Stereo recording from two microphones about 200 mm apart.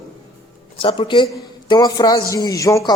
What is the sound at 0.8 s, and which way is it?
A man's voice, 25° left (ahead or behind).